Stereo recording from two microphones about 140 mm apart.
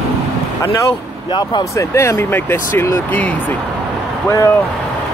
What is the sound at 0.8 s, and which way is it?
Speech, 35° left (ahead or behind).